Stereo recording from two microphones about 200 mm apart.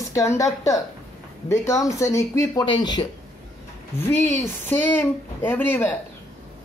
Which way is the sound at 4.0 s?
10° left (ahead or behind).